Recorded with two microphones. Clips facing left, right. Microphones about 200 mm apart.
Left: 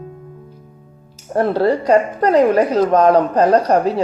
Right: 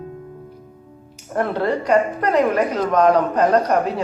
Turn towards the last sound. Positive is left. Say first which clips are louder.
# left 3 dB
turn(degrees=35)  # may be behind; listen again after turning